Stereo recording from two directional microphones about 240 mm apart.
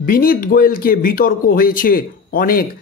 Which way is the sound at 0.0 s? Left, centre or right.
Left.